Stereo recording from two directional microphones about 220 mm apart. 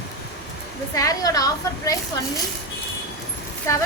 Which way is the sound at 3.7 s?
15° left (ahead or behind).